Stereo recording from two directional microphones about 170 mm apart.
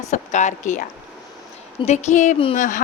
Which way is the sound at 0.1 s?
45° left (ahead or behind).